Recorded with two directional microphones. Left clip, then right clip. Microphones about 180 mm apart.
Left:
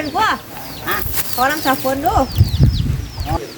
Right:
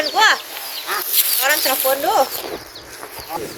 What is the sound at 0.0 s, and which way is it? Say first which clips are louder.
Speech: right 2 dB; 75° left (ahead or behind).